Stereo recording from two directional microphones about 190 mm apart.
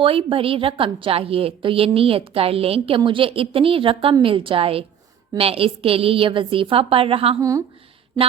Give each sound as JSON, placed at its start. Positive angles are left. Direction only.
{"t": 0.0, "sound": "a woman's voice", "side_deg": -30}